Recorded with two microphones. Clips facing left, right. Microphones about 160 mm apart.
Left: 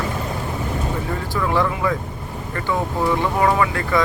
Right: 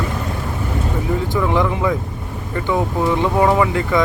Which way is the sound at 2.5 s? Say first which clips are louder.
Right 4 dB; 20° right (ahead or behind).